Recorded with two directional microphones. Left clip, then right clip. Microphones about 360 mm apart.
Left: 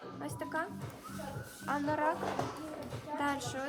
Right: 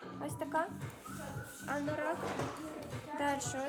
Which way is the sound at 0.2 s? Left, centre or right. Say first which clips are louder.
Right 2 dB; centre.